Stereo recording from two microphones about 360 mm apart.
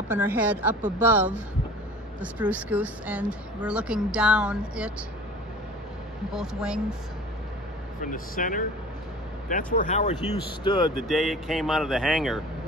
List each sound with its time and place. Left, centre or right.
0.1 s speech: centre
6.3 s speech: centre
8.0 s speech: left
11.1 s speech: centre